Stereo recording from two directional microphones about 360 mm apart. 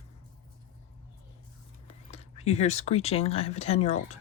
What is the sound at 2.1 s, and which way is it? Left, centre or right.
Speech, centre.